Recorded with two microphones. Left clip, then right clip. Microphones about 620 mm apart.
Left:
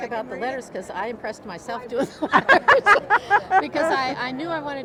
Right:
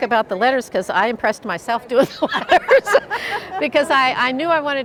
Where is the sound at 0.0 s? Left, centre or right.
Right.